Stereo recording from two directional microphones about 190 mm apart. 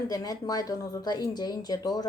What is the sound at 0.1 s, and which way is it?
A woman's voice, 20° left (ahead or behind).